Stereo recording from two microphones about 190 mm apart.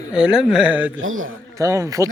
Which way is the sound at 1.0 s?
90° right.